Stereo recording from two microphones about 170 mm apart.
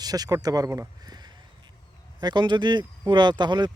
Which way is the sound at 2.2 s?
25° right (ahead or behind).